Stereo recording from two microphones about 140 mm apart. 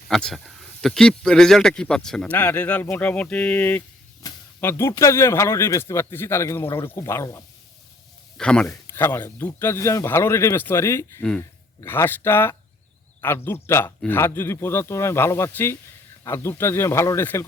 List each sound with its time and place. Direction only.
0.1 s speech: 5° left (ahead or behind)
4.2 s a sound: 25° left (ahead or behind)
4.6 s speech: 20° left (ahead or behind)
8.4 s speech: 5° left (ahead or behind)
8.7 s speech: 15° left (ahead or behind)
11.2 s speech: 5° left (ahead or behind)
11.8 s speech: 15° left (ahead or behind)